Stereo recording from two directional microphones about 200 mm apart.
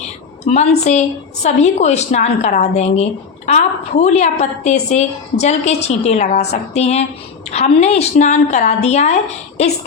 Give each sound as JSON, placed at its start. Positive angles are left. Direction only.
{"t": 0.4, "sound": "a woman's voice", "side_deg": 35}